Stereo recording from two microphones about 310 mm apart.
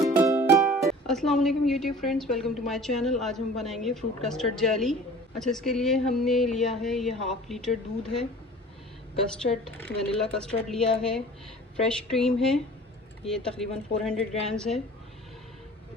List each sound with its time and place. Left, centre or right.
0.0 s speech: centre
9.4 s speech: centre